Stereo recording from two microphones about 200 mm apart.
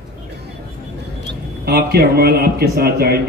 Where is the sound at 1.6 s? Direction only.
50° right (ahead or behind).